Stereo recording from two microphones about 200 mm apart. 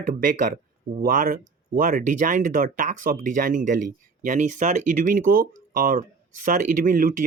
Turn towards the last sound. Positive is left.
turn(degrees=-45)  # may be behind; listen again after turning